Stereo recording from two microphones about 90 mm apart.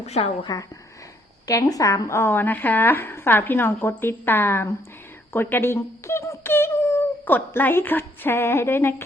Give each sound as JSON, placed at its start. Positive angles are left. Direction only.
{"t": 0.5, "sound": "a woman's voice", "side_deg": 45}